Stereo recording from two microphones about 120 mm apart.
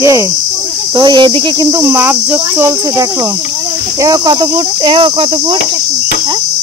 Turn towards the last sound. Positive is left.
turn(degrees=-45)  # may be behind; listen again after turning